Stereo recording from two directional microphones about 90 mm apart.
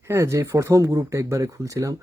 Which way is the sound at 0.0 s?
30° right (ahead or behind).